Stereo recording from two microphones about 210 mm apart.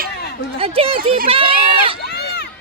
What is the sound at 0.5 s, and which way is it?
Speech, 25° right (ahead or behind).